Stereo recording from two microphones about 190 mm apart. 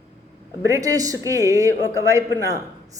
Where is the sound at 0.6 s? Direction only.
15° right (ahead or behind).